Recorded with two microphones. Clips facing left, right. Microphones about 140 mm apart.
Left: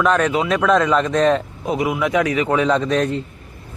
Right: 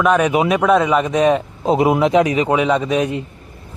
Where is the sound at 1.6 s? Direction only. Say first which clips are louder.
Right 7 dB; 30° right (ahead or behind).